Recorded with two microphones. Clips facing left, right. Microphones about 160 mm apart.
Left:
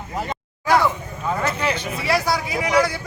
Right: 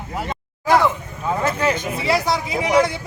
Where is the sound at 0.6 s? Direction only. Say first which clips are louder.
Right 2 dB; 20° right (ahead or behind).